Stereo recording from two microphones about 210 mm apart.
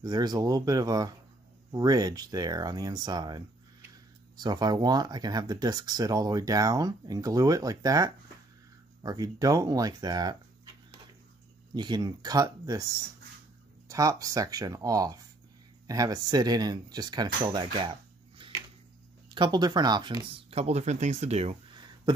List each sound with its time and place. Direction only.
0.0 s speech: 20° right (ahead or behind)
19.3 s speech: 20° right (ahead or behind)